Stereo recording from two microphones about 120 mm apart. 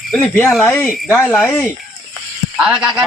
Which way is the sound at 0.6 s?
15° left (ahead or behind).